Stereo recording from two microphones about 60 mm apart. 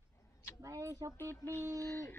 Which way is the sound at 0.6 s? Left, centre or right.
Right.